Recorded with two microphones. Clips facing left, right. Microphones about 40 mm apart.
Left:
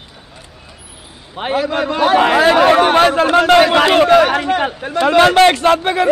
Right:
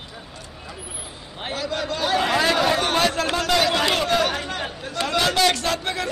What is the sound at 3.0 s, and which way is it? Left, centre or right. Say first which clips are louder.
Speech: left 9 dB; left.